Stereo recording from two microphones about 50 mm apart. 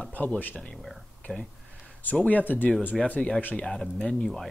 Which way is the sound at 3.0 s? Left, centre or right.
Left.